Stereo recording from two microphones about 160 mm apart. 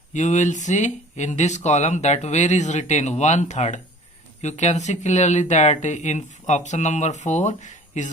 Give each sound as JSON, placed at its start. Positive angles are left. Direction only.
{"t": 0.1, "sound": "speech", "side_deg": 50}